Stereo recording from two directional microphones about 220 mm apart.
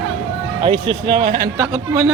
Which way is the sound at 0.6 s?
25° right (ahead or behind).